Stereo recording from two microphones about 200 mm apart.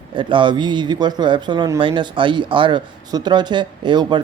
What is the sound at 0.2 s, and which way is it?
Speech, 25° right (ahead or behind).